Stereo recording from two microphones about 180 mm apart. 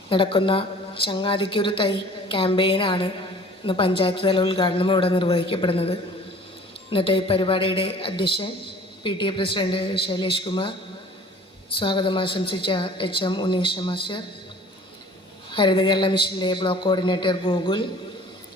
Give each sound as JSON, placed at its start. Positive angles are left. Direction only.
{"t": 0.1, "sound": "a woman's voice", "side_deg": 30}
{"t": 11.8, "sound": "a woman's voice", "side_deg": 25}
{"t": 15.5, "sound": "a woman's voice", "side_deg": 25}